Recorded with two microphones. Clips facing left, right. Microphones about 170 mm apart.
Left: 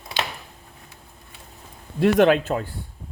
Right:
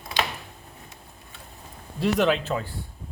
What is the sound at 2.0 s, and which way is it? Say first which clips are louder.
Speech: left 6 dB; 55° left (ahead or behind).